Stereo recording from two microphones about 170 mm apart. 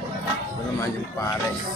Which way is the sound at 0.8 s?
20° left (ahead or behind).